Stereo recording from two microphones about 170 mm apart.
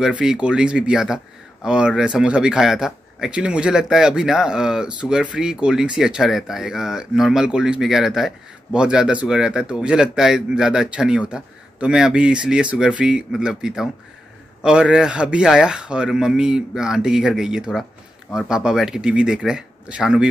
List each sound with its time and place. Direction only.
0.0 s speech: 5° right (ahead or behind)